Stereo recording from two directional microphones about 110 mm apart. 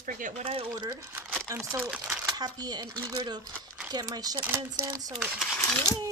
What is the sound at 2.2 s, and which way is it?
Speech, 35° right (ahead or behind).